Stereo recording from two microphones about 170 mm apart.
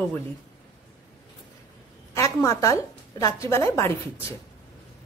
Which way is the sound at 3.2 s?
15° left (ahead or behind).